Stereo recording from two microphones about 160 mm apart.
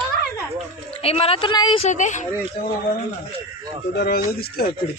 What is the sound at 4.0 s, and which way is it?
Speech, 75° left (ahead or behind).